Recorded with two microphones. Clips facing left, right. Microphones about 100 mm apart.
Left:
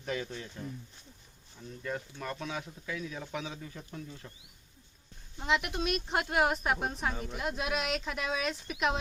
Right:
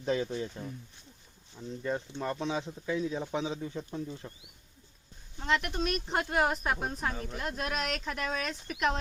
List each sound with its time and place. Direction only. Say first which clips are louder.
0.0 s speech: right 6 dB; 25° right (ahead or behind)
1.8 s speech: right 4 dB; 25° right (ahead or behind)
5.4 s speech: right 1 dB; 5° left (ahead or behind)